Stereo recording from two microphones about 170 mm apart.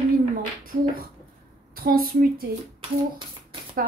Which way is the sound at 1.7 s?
60° right (ahead or behind).